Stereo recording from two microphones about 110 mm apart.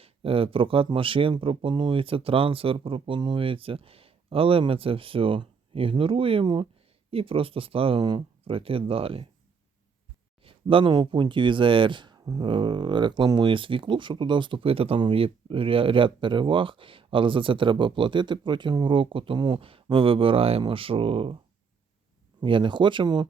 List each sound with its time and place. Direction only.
0.0 s speech: 60° right (ahead or behind)
10.4 s speech: 55° right (ahead or behind)
22.4 s speech: 50° right (ahead or behind)